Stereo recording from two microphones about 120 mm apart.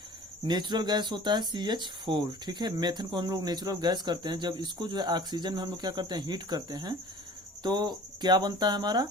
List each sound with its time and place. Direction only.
0.4 s speech: 35° right (ahead or behind)